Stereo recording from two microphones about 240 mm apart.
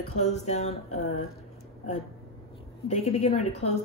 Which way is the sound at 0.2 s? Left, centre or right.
Left.